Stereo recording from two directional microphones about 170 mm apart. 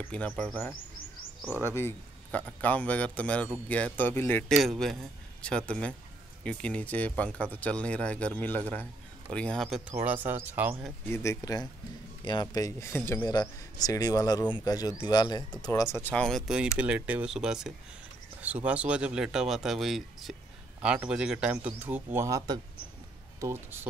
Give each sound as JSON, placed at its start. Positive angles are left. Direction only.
{"t": 0.1, "sound": "speech", "side_deg": 5}
{"t": 4.6, "sound": "speech", "side_deg": 0}
{"t": 9.9, "sound": "a man's voice", "side_deg": -10}
{"t": 11.1, "sound": "a man's voice", "side_deg": 20}